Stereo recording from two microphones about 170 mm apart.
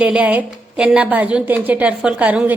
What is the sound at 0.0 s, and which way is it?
A woman's voice, 5° right (ahead or behind).